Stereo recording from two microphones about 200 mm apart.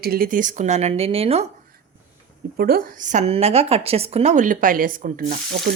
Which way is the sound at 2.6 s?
50° right (ahead or behind).